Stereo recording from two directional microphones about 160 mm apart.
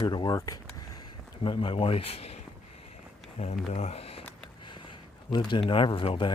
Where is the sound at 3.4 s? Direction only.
45° left (ahead or behind).